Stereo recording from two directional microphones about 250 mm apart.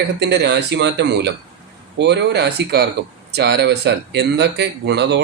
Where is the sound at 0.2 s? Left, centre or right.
Right.